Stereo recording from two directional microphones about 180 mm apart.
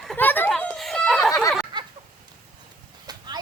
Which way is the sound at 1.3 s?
20° left (ahead or behind).